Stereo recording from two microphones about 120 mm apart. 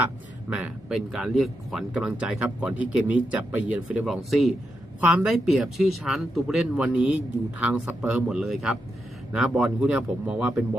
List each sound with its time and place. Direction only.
0.5 s speech: 5° right (ahead or behind)
4.9 s a man's voice: 10° right (ahead or behind)
8.0 s speech: 5° right (ahead or behind)